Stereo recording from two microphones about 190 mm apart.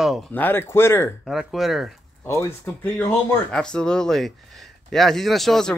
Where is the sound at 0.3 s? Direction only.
10° left (ahead or behind).